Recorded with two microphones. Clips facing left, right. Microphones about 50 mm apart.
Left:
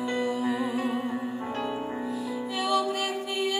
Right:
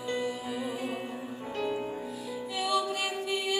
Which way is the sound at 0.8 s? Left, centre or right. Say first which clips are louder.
Left 6 dB; left.